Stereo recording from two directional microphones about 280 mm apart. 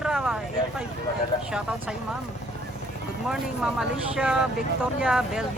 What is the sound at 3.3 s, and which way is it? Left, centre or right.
Speech, centre.